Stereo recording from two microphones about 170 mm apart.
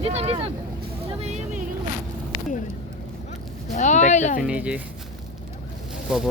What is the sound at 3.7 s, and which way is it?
Speech, 45° left (ahead or behind).